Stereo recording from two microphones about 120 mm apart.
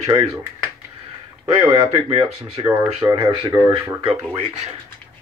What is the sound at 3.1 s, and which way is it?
Speech, 40° right (ahead or behind).